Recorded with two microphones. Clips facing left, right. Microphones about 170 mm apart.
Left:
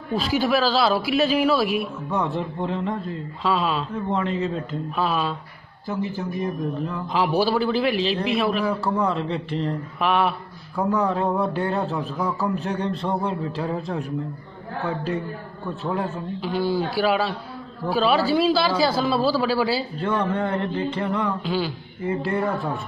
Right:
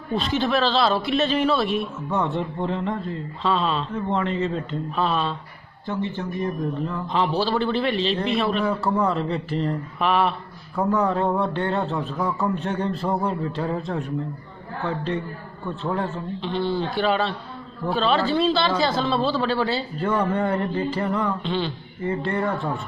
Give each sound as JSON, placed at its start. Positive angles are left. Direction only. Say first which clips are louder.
{"t": 0.1, "sound": "a man's voice", "louder": "left 1 dB", "side_deg": 5}
{"t": 15.8, "sound": "a man's voice", "louder": "even", "side_deg": 5}
{"t": 20.0, "sound": "a man's voice", "louder": "right 4 dB", "side_deg": -5}